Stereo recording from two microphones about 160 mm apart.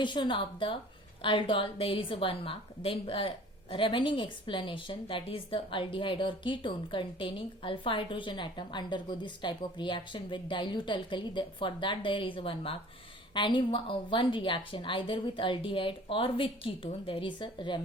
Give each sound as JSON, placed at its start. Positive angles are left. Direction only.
{"t": 0.0, "sound": "a woman's voice", "side_deg": 30}